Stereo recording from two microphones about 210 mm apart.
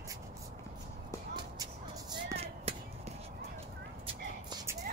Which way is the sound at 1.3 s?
20° right (ahead or behind).